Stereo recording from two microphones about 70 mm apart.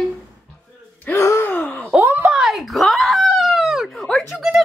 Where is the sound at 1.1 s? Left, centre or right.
Left.